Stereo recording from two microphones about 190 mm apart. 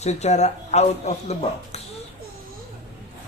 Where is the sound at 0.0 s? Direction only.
35° left (ahead or behind).